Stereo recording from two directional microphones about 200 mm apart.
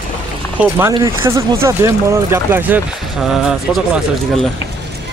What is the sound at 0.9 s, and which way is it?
Speech, 15° right (ahead or behind).